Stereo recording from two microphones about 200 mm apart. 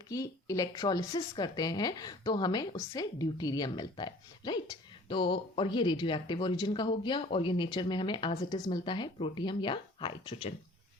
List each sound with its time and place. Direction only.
0.1 s a woman's voice: 15° left (ahead or behind)